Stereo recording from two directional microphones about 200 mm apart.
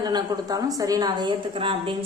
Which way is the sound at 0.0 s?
20° right (ahead or behind).